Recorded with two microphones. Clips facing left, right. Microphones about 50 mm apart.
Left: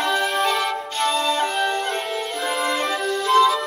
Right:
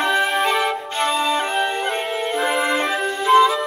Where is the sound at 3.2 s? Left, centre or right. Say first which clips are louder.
Right 3 dB; centre.